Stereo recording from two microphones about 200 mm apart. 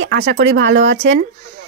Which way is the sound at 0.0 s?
70° right (ahead or behind).